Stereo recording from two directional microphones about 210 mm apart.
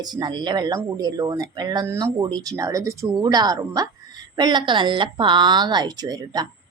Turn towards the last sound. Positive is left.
turn(degrees=-20)  # may be behind; listen again after turning